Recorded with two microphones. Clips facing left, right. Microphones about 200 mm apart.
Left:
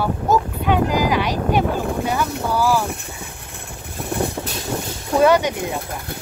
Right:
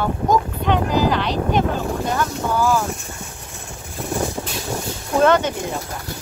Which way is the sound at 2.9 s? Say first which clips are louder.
Even; 60° left (ahead or behind).